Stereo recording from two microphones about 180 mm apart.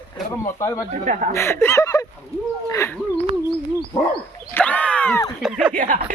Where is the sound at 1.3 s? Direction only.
15° left (ahead or behind).